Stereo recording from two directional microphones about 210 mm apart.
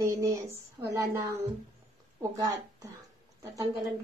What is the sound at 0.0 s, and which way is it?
Speech, 15° right (ahead or behind).